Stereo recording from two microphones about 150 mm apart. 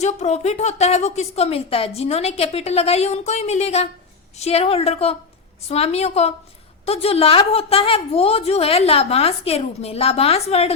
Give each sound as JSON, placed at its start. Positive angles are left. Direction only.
{"t": 0.0, "sound": "a woman's voice", "side_deg": 50}